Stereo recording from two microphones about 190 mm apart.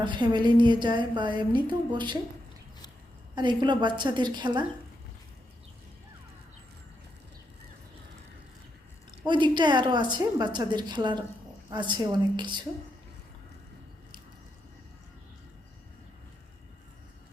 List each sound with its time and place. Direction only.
0.0 s a woman's voice: 25° right (ahead or behind)
3.3 s a woman's voice: 25° right (ahead or behind)
9.2 s a woman's voice: 25° right (ahead or behind)